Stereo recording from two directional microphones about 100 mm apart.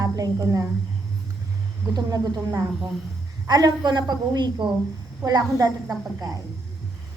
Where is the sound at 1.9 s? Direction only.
35° right (ahead or behind).